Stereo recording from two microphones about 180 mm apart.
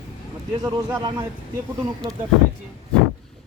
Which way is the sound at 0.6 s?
20° right (ahead or behind).